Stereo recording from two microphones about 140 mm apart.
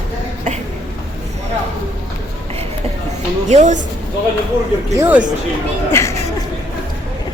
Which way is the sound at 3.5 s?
55° right (ahead or behind).